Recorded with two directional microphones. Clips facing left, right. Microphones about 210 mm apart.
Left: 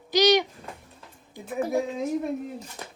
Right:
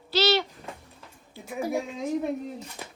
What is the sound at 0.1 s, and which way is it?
Owl, 15° left (ahead or behind).